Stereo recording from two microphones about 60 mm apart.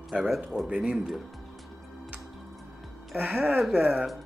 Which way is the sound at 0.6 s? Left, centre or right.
Centre.